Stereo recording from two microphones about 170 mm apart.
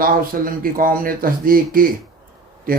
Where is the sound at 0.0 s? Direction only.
55° right (ahead or behind).